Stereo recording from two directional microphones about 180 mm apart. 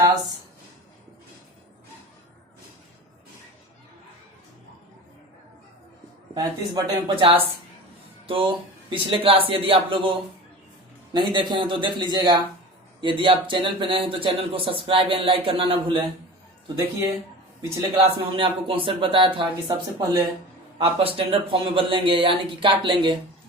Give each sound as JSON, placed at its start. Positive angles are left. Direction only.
{"t": 6.3, "sound": "speech", "side_deg": -25}
{"t": 17.9, "sound": "a man's voice", "side_deg": -30}
{"t": 20.7, "sound": "a man's voice", "side_deg": -30}